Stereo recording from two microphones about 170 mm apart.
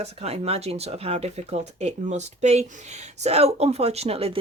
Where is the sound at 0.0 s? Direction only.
40° right (ahead or behind).